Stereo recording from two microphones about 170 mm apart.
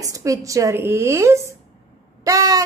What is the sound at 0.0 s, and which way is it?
A woman's voice, 20° right (ahead or behind).